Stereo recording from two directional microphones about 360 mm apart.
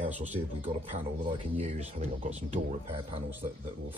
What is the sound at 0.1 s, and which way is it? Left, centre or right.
Speech, centre.